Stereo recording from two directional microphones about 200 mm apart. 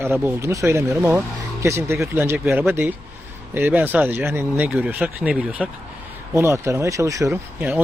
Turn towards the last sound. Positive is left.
turn(degrees=-10)  # may be behind; listen again after turning